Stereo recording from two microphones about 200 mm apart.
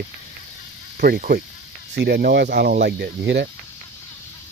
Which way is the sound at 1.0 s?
50° right (ahead or behind).